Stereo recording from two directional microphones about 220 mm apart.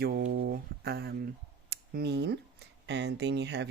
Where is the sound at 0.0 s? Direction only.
45° right (ahead or behind).